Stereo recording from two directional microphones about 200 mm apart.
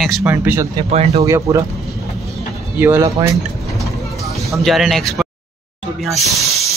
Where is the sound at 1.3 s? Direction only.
15° right (ahead or behind).